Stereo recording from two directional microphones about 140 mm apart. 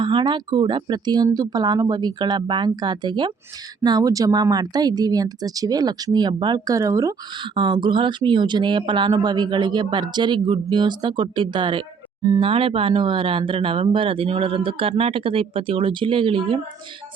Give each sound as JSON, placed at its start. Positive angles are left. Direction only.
{"t": 0.0, "sound": "speech", "side_deg": -35}